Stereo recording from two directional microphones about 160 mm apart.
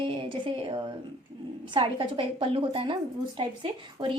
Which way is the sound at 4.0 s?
30° right (ahead or behind).